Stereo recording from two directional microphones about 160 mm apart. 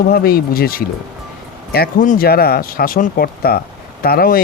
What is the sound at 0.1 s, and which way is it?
Speech, 75° left (ahead or behind).